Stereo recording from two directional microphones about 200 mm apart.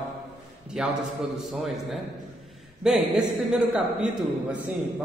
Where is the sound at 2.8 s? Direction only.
5° right (ahead or behind).